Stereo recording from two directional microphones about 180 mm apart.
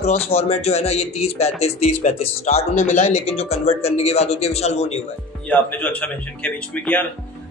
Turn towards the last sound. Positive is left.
turn(degrees=10)  # may be behind; listen again after turning